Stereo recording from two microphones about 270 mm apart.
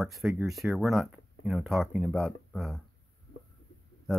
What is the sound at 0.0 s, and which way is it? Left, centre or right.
Speech, centre.